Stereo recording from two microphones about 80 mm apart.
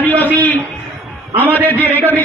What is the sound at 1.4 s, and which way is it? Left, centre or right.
Speech, right.